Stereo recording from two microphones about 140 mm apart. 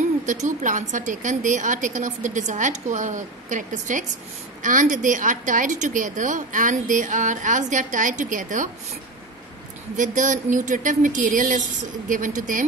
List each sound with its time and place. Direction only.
0.3 s a woman's voice: 60° right (ahead or behind)
9.9 s a woman's voice: 65° right (ahead or behind)